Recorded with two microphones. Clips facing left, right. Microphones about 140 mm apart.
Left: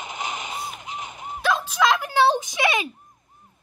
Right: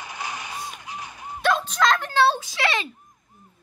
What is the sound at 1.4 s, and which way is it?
Dog, 5° left (ahead or behind).